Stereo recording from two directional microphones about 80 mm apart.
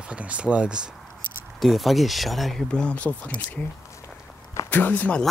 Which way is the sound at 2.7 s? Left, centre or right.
Centre.